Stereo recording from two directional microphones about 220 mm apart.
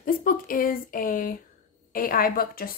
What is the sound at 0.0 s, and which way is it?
Speech, 40° left (ahead or behind).